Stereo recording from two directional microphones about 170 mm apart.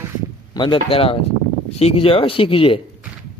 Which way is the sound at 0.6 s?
30° left (ahead or behind).